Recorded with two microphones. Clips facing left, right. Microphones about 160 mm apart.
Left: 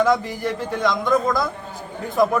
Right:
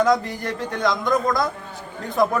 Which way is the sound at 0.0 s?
Centre (ahead or behind).